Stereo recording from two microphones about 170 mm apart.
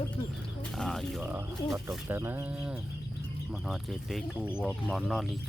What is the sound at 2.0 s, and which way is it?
Speech, 10° right (ahead or behind).